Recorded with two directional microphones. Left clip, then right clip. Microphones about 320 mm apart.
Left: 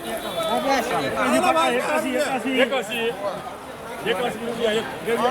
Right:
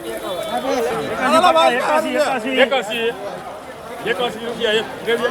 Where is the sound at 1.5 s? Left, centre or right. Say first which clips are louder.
Right 6 dB; right.